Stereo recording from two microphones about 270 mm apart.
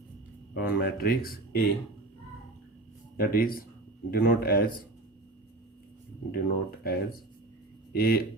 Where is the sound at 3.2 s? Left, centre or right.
Left.